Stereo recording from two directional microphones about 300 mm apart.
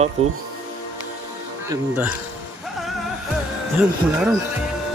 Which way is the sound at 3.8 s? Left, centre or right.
Centre.